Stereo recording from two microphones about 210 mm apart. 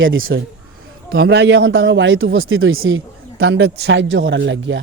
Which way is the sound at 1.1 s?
50° right (ahead or behind).